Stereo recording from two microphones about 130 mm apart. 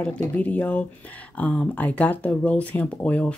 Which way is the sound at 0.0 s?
10° left (ahead or behind).